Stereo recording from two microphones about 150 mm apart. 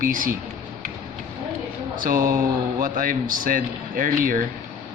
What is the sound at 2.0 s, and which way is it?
A man's voice, 70° right (ahead or behind).